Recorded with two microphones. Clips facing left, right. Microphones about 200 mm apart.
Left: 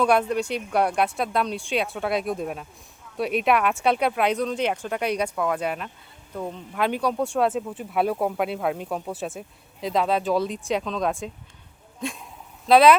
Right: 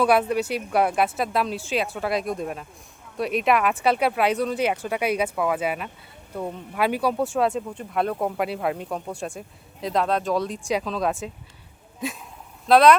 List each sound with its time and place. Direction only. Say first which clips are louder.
0.0 s speech: right 1 dB; 5° right (ahead or behind)